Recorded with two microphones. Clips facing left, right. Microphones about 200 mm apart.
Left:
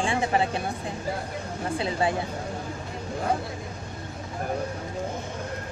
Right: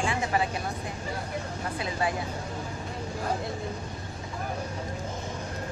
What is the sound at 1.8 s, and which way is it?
Speech, 30° left (ahead or behind).